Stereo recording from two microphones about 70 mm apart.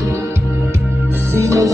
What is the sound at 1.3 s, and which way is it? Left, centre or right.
Music, right.